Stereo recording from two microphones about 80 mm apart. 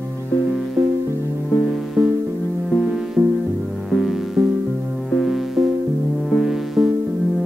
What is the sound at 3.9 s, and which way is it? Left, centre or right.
Music, centre.